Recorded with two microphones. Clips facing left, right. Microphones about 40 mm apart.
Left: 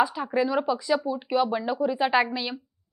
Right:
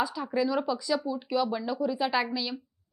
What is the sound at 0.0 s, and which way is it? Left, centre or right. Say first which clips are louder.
Speech: left 4 dB; left.